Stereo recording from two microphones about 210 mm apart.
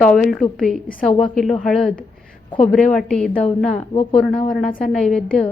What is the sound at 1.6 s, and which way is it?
A woman's voice, centre (ahead or behind).